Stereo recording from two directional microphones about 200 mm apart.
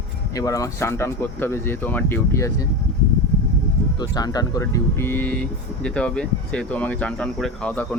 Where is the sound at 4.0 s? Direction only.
20° left (ahead or behind).